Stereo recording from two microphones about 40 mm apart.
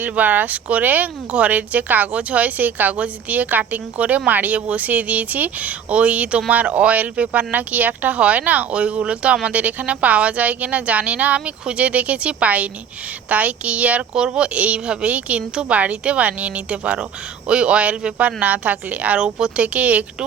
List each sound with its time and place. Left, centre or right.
0.0 s speech: right
4.3 s speech: right
4.5 s a woman's voice: right
19.2 s a woman's voice: centre
19.6 s speech: right